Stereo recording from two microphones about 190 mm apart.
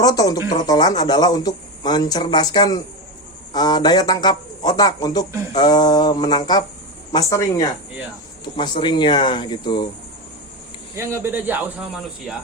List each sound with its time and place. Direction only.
0.0 s a woman's voice: 20° left (ahead or behind)
8.8 s a woman's voice: 25° left (ahead or behind)
10.9 s speech: 15° right (ahead or behind)